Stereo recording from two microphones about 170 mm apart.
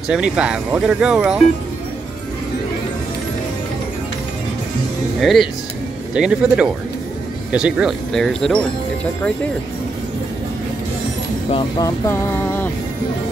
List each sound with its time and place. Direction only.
0.1 s speech: 5° right (ahead or behind)
5.2 s speech: centre (ahead or behind)
11.8 s music: 15° left (ahead or behind)